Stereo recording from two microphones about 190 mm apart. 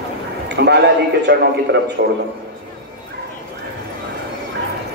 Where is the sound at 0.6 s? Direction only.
60° right (ahead or behind).